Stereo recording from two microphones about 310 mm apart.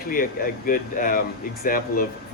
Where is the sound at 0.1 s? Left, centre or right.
Left.